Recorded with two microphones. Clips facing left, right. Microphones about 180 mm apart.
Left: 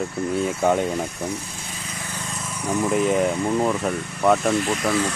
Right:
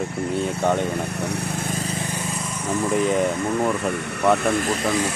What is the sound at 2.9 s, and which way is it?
Speech, centre (ahead or behind).